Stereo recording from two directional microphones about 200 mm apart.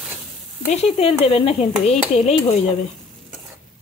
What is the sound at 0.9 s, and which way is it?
Speech, 30° left (ahead or behind).